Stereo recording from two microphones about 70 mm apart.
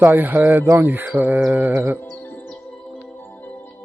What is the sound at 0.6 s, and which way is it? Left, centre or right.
Speech, right.